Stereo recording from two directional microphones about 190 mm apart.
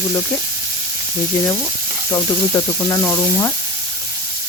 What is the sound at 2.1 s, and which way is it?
Speech, 15° left (ahead or behind).